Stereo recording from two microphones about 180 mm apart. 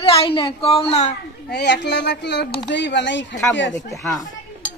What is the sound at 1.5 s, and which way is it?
A woman's voice, 70° left (ahead or behind).